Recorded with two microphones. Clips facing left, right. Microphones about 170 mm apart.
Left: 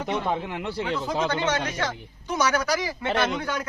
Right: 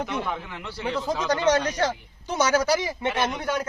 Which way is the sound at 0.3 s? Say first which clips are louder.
Left 5 dB; 25° left (ahead or behind).